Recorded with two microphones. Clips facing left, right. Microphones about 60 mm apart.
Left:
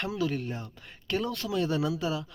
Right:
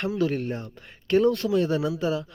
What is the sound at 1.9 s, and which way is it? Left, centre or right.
Speech, right.